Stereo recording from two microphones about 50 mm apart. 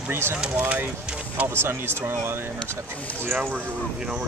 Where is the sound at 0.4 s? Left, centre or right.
Right.